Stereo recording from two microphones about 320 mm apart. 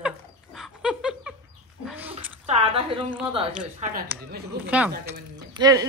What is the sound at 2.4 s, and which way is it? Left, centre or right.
Speech, centre.